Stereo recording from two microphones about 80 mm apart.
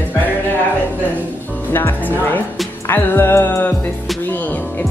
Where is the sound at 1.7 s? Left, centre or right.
Left.